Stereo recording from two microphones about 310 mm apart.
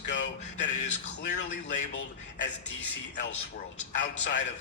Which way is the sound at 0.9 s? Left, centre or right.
Left.